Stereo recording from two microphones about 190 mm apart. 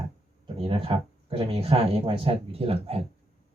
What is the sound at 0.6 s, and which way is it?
Speech, 30° right (ahead or behind).